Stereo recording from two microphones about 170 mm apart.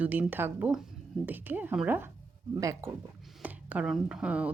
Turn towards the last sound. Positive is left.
turn(degrees=-5)  # may be behind; listen again after turning